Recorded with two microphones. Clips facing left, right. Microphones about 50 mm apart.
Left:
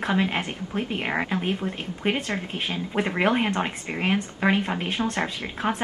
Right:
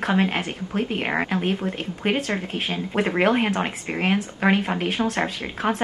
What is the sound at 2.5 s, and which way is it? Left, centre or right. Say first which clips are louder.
Speech: right 2 dB; centre.